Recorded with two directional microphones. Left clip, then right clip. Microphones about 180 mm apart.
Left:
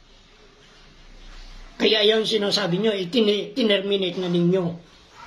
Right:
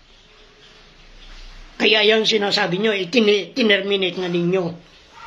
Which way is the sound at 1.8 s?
15° left (ahead or behind).